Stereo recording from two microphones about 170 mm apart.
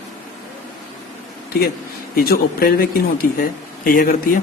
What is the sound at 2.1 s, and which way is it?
Speech, 65° left (ahead or behind).